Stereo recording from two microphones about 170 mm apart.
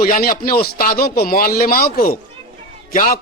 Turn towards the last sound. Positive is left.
turn(degrees=55)  # may be behind; listen again after turning